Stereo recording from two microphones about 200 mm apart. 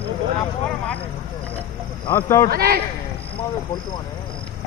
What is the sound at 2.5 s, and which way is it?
Speech, 50° right (ahead or behind).